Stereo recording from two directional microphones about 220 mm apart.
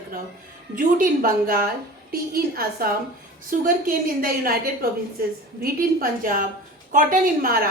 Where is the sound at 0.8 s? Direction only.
40° right (ahead or behind).